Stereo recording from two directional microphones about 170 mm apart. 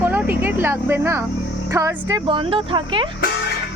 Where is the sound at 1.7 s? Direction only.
20° right (ahead or behind).